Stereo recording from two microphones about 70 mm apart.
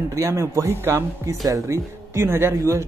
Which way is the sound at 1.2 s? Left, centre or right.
Right.